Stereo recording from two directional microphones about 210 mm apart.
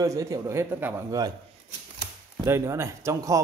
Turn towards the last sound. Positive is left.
turn(degrees=-15)  # may be behind; listen again after turning